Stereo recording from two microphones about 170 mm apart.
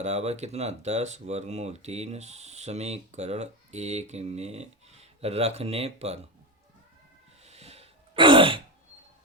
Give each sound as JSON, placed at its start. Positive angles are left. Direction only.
{"t": 0.0, "sound": "speech", "side_deg": -40}
{"t": 7.4, "sound": "throat clearing", "side_deg": -40}